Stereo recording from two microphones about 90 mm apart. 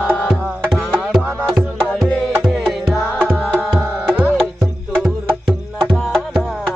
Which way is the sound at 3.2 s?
20° right (ahead or behind).